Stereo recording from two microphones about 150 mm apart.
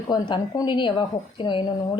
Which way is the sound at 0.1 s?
25° left (ahead or behind).